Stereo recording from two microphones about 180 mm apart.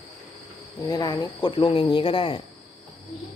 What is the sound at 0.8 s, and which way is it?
Speech, 20° left (ahead or behind).